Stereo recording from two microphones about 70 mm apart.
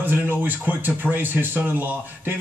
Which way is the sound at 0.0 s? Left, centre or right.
Right.